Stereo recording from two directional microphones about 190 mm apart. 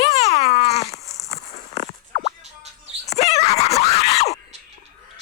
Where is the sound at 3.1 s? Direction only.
35° left (ahead or behind).